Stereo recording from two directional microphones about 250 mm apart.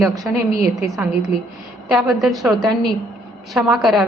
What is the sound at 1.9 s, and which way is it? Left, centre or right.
Speech, centre.